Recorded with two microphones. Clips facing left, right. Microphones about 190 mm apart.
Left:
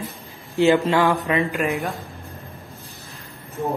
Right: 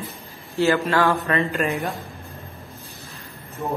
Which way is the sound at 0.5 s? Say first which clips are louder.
Left 3 dB; 20° left (ahead or behind).